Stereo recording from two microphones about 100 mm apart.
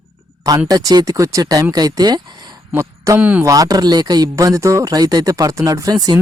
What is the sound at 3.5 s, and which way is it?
Speech, 40° right (ahead or behind).